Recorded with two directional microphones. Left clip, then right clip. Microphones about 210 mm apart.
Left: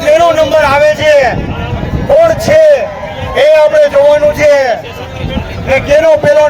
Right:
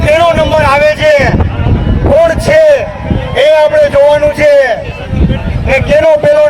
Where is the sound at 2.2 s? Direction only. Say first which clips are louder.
Even; 35° right (ahead or behind).